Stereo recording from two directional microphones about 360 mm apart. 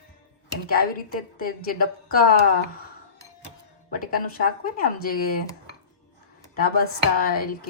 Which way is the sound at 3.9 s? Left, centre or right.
Left.